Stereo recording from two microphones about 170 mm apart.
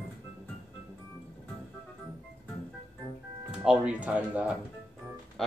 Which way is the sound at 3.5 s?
5° right (ahead or behind).